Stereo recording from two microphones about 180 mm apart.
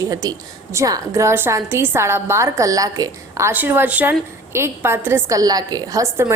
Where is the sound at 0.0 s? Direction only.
20° right (ahead or behind).